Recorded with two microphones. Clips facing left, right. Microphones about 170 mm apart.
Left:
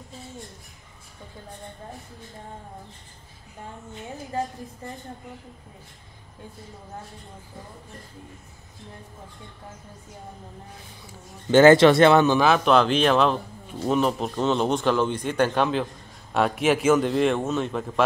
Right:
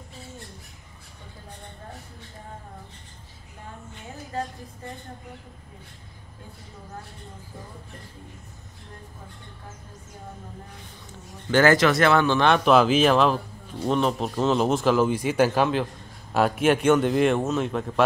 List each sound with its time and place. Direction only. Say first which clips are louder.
11.5 s speech: left 5 dB; 25° left (ahead or behind)
12.4 s speech: even; 5° left (ahead or behind)